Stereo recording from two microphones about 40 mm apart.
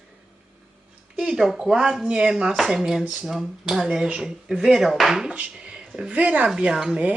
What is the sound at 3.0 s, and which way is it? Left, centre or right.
Speech, centre.